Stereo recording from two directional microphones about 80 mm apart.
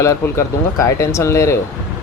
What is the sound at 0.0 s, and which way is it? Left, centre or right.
Speech, left.